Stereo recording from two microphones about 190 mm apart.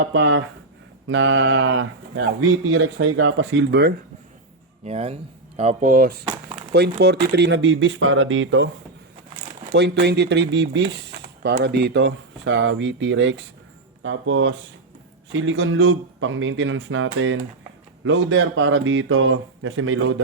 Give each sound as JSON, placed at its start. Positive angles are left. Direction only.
{"t": 0.0, "sound": "a man's voice", "side_deg": -90}
{"t": 4.9, "sound": "speech", "side_deg": -35}
{"t": 6.2, "sound": "a sound", "side_deg": -25}
{"t": 6.7, "sound": "speech", "side_deg": -60}
{"t": 9.3, "sound": "speech", "side_deg": -60}
{"t": 14.0, "sound": "a man's voice", "side_deg": -90}